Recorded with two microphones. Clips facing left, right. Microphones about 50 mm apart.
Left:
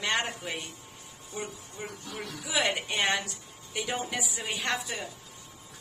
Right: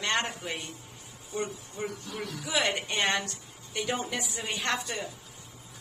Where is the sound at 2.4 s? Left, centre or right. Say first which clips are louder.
Even; centre.